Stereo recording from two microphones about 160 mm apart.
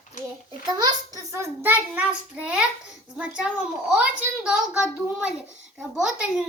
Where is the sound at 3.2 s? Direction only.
5° right (ahead or behind).